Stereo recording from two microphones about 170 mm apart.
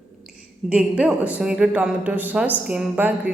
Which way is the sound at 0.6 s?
5° right (ahead or behind).